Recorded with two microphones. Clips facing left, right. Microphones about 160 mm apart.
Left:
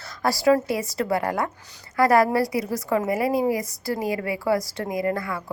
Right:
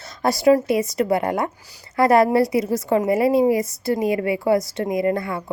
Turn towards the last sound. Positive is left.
turn(degrees=-25)  # may be behind; listen again after turning